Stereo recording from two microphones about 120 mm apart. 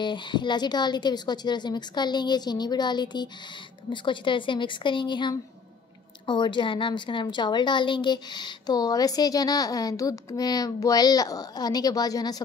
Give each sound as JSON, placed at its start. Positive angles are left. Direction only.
{"t": 0.0, "sound": "a woman's voice", "side_deg": 40}